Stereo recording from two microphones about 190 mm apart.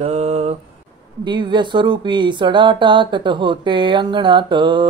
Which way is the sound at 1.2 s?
25° right (ahead or behind).